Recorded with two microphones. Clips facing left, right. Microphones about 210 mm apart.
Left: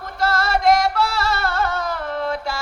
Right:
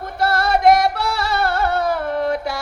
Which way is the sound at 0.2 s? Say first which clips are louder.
Right 3 dB; 60° right (ahead or behind).